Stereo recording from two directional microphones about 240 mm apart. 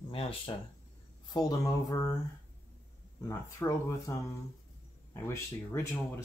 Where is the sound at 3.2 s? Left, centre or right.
Centre.